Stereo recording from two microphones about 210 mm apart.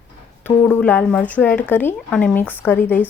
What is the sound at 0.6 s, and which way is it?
Speech, 5° left (ahead or behind).